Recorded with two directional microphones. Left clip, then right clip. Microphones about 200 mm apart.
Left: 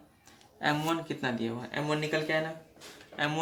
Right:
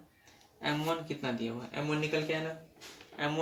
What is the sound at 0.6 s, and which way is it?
Speech, 50° left (ahead or behind).